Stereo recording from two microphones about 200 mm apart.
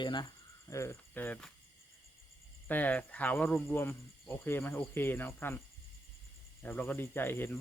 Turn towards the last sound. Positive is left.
turn(degrees=10)  # may be behind; listen again after turning